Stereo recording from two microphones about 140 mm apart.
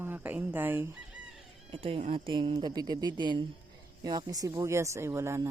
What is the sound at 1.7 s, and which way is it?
Speech, 45° right (ahead or behind).